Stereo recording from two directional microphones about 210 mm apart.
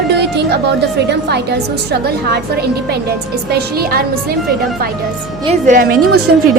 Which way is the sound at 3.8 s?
45° right (ahead or behind).